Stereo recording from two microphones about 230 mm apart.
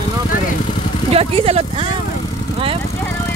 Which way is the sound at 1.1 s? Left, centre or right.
Right.